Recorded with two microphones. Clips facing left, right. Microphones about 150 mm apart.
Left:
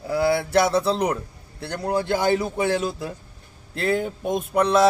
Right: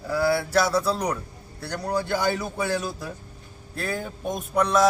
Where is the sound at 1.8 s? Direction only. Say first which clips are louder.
Left 3 dB; 55° left (ahead or behind).